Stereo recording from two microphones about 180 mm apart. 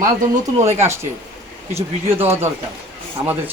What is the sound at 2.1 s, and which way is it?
Speech, 15° right (ahead or behind).